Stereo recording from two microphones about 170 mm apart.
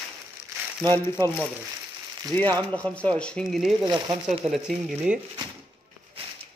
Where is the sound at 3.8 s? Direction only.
25° right (ahead or behind).